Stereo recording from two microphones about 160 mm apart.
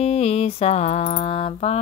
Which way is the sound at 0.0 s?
40° left (ahead or behind).